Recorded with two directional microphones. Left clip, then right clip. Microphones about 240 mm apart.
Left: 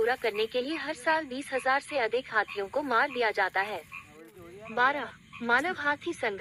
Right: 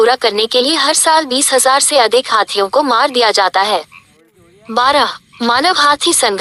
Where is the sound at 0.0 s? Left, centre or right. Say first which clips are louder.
Right 16 dB; right.